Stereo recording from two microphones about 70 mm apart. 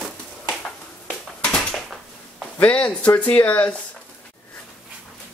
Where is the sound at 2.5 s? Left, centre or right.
Centre.